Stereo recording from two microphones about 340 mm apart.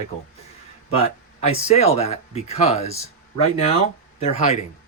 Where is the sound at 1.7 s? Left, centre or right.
Centre.